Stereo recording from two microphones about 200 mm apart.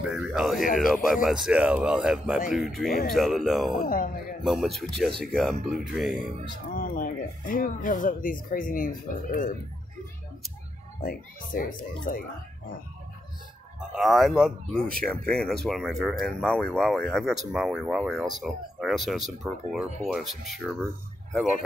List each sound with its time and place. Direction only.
0.0 s speech: centre (ahead or behind)
3.8 s speech: 45° left (ahead or behind)
4.5 s speech: centre (ahead or behind)
6.7 s speech: 45° left (ahead or behind)
11.0 s speech: 45° left (ahead or behind)
13.7 s speech: centre (ahead or behind)